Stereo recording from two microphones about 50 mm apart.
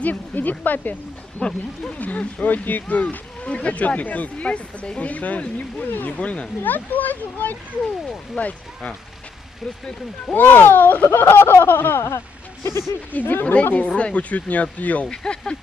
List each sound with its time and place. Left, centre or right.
0.0 s speech: left
5.9 s speech: left
6.1 s speech: left
6.6 s speech: left
10.3 s speech: left
11.1 s speech: left
12.6 s speech: left
13.1 s speech: left
13.7 s speech: left
15.0 s speech: centre